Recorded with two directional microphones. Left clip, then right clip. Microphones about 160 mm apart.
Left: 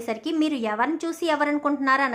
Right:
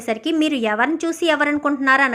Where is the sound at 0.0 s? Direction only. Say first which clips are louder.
Right 5 dB; 15° right (ahead or behind).